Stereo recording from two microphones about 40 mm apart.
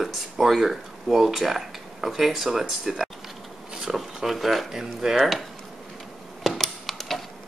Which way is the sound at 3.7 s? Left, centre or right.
Centre.